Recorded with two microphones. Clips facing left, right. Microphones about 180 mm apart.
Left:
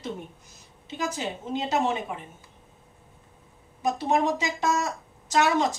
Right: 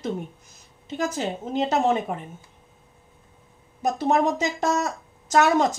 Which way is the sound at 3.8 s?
45° right (ahead or behind).